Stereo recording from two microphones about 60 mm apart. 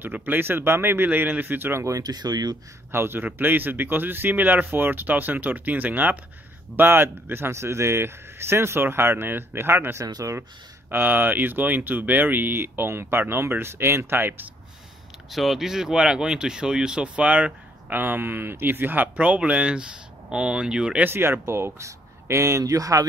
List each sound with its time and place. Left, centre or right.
0.0 s speech: right
1.9 s speech: right
2.9 s speech: right
10.0 s speech: right
10.9 s speech: right
15.3 s speech: centre; by 17.9 s right
17.9 s speech: right
19.1 s speech: right
21.0 s speech: right